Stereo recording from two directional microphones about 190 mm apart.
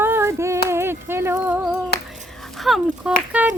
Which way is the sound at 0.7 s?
15° right (ahead or behind).